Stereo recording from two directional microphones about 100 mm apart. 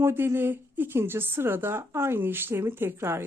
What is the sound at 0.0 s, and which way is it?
Speech, 25° right (ahead or behind).